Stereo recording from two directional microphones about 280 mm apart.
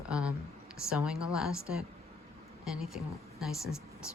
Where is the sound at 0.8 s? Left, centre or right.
Centre.